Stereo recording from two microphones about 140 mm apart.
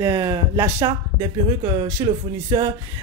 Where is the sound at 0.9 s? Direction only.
35° right (ahead or behind).